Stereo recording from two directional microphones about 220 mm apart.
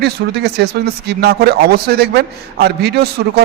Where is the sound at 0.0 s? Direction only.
45° right (ahead or behind).